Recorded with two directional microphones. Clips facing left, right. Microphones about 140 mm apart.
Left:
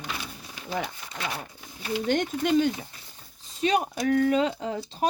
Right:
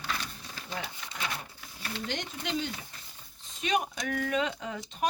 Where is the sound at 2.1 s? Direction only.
50° left (ahead or behind).